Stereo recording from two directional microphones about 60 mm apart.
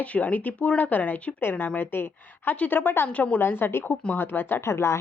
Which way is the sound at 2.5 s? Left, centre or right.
Left.